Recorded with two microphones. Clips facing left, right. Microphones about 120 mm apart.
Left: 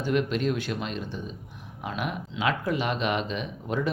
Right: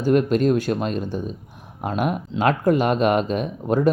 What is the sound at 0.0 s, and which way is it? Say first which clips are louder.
Speech: right 8 dB; 45° right (ahead or behind).